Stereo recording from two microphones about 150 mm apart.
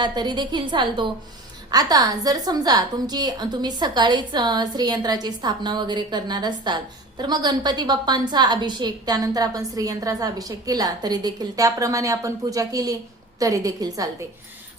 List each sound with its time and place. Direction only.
0.0 s a woman's voice: 30° right (ahead or behind)